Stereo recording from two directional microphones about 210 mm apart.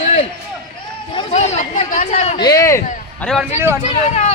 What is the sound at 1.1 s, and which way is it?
Speech, 25° left (ahead or behind).